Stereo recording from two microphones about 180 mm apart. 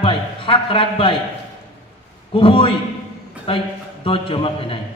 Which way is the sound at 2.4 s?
30° left (ahead or behind).